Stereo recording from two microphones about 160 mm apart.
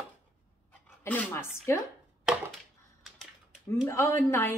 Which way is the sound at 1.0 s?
10° left (ahead or behind).